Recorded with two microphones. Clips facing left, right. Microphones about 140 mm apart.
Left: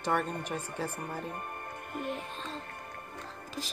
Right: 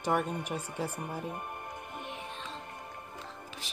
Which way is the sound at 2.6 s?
10° right (ahead or behind).